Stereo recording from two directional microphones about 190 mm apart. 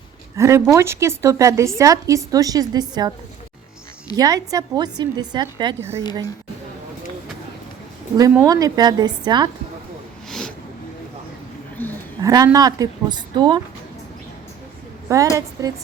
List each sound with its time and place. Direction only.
0.3 s a woman's voice: 15° right (ahead or behind)
4.1 s a woman's voice: 20° right (ahead or behind)
8.3 s a woman's voice: 20° right (ahead or behind)
10.2 s a sound: centre (ahead or behind)
12.2 s a woman's voice: 15° right (ahead or behind)
15.1 s a woman's voice: 15° right (ahead or behind)